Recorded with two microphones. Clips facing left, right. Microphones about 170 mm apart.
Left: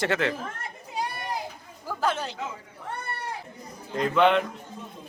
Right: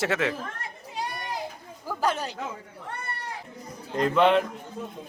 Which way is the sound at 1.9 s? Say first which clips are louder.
Even; 10° right (ahead or behind).